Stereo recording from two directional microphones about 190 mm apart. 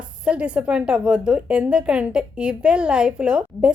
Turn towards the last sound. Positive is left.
turn(degrees=-5)  # may be behind; listen again after turning